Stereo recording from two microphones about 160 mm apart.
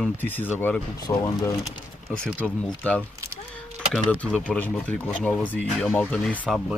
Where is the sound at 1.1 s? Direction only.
25° left (ahead or behind).